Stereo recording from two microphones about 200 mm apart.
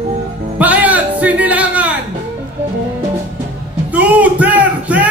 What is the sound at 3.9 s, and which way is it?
Speech, 5° right (ahead or behind).